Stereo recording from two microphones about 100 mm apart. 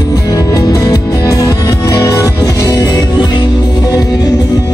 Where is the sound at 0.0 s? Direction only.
40° left (ahead or behind).